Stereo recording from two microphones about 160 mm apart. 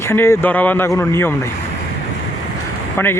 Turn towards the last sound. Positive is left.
turn(degrees=15)  # may be behind; listen again after turning